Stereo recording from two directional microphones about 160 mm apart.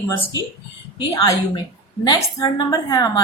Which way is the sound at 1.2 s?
30° left (ahead or behind).